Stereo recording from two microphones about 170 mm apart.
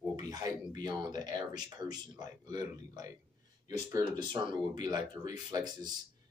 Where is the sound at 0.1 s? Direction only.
25° right (ahead or behind).